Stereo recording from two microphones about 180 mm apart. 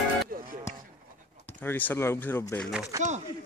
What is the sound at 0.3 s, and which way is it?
Music, 55° right (ahead or behind).